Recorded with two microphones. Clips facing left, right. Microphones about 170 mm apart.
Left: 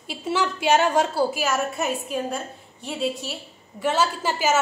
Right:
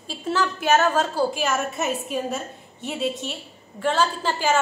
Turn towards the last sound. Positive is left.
turn(degrees=10)  # may be behind; listen again after turning